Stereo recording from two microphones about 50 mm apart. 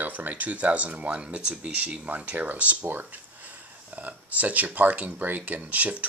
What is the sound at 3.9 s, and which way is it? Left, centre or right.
Speech, right.